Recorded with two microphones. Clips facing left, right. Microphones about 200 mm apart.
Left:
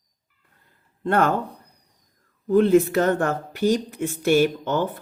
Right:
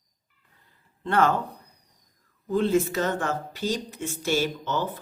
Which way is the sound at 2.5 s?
55° left (ahead or behind).